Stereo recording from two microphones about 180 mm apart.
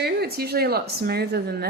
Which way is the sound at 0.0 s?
60° right (ahead or behind).